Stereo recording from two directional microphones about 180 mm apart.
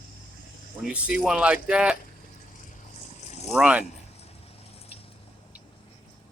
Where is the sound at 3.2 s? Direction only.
40° left (ahead or behind).